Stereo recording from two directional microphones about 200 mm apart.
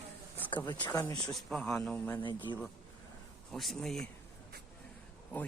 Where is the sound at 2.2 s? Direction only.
25° left (ahead or behind).